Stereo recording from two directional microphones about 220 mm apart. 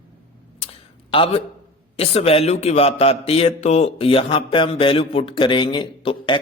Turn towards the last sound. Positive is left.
turn(degrees=20)  # may be behind; listen again after turning